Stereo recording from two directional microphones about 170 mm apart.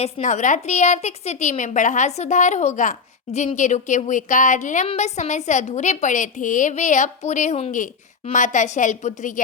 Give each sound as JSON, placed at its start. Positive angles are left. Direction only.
{"t": 0.0, "sound": "a woman's voice", "side_deg": 45}